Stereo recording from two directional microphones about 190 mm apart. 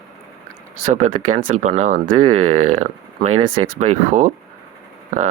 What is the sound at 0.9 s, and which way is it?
Speech, 45° right (ahead or behind).